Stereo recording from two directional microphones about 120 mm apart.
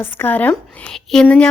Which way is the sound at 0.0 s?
15° left (ahead or behind).